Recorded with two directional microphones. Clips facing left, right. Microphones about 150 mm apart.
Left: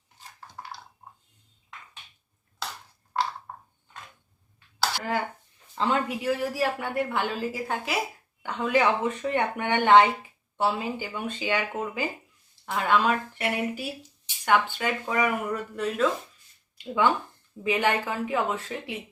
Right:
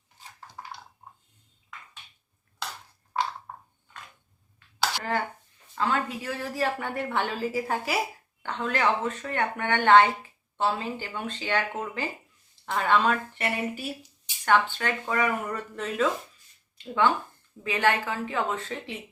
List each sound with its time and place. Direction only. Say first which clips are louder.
4.8 s dishes: even; 5° left (ahead or behind)
5.7 s speech: left 2 dB; 20° left (ahead or behind); by 7.9 s 5° right (ahead or behind)
8.4 s speech: left 4 dB; 10° left (ahead or behind)